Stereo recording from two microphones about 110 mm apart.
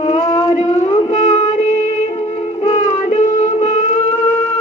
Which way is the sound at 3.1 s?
90° left.